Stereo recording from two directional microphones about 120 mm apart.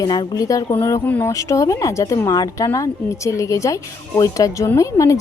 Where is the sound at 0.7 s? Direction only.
20° left (ahead or behind).